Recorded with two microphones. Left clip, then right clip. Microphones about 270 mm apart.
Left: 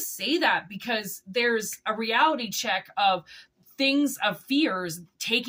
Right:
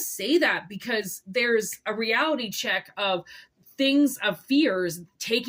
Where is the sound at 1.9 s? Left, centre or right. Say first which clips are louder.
Left 1 dB; centre.